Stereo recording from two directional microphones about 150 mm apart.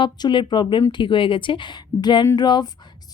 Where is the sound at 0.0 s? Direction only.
30° left (ahead or behind).